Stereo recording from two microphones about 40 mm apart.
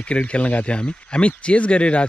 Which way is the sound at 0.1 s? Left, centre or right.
Left.